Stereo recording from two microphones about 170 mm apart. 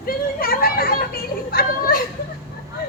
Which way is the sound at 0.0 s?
60° left (ahead or behind).